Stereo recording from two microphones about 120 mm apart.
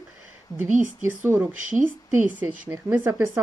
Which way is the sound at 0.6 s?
90° right.